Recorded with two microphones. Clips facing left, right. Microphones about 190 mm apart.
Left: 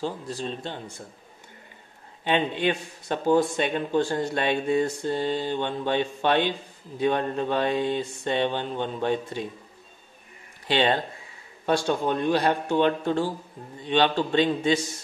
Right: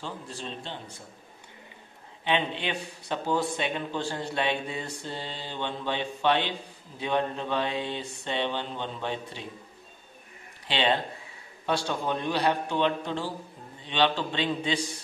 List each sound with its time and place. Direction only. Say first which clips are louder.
0.0 s speech: left 7 dB; 40° left (ahead or behind)
2.2 s a man's voice: left 5 dB; 45° left (ahead or behind)
10.7 s a man's voice: left 4 dB; 45° left (ahead or behind)